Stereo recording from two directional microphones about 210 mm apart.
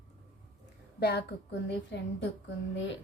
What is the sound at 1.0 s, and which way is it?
A woman's voice, 50° left (ahead or behind).